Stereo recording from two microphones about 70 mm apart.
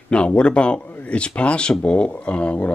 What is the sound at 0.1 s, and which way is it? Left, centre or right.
Speech, centre.